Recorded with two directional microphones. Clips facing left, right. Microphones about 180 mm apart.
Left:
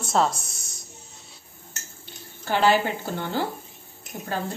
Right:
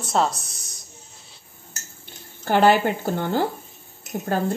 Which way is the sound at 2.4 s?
50° right (ahead or behind).